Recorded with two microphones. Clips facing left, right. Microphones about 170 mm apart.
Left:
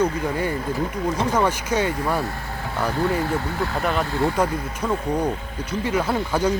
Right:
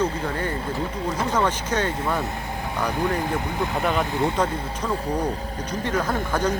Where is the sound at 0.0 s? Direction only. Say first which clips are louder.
Left 3 dB; 10° left (ahead or behind).